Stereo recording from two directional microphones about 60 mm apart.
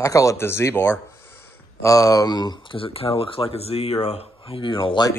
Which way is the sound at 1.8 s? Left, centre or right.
Left.